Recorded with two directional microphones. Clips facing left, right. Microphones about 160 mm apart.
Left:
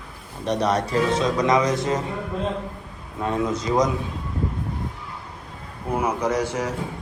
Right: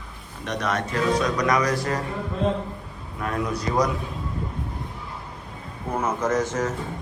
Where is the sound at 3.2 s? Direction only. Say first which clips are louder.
Left 3 dB; 25° left (ahead or behind).